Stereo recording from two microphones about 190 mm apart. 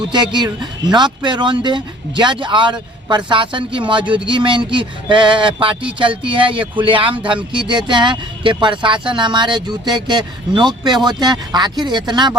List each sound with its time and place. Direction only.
0.1 s speech: 25° right (ahead or behind)